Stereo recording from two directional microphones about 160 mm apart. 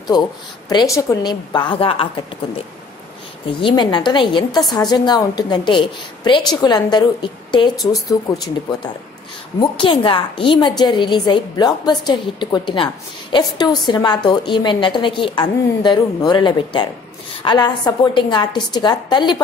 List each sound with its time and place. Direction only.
0.1 s a woman's voice: 25° left (ahead or behind)
3.6 s a woman's voice: 30° left (ahead or behind)